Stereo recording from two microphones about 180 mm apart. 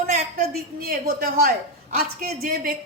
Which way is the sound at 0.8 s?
55° right (ahead or behind).